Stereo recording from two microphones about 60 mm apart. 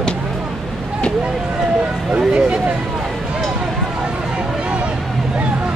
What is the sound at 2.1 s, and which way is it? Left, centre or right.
Speech, centre.